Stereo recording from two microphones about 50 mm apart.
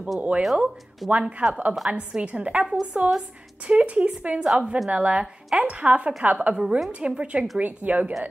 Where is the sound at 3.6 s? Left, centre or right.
Right.